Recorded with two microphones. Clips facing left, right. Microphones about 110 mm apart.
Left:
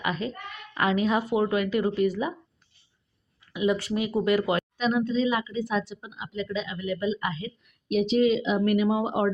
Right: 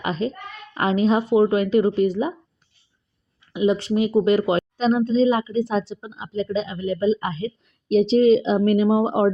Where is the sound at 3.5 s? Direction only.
25° right (ahead or behind).